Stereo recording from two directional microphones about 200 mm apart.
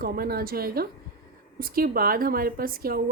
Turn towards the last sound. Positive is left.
turn(degrees=-45)  # may be behind; listen again after turning